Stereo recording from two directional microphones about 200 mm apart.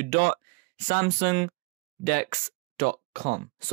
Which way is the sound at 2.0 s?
45° right (ahead or behind).